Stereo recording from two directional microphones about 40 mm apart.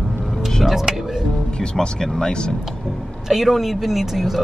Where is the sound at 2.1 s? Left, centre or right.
Centre.